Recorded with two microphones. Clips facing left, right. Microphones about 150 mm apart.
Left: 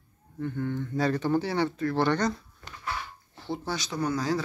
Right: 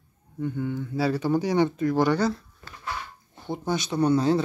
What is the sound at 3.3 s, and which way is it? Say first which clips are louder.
Speech: right 4 dB; 20° right (ahead or behind).